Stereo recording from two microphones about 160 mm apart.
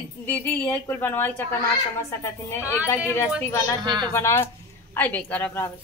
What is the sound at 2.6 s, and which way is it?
Speech, 20° left (ahead or behind).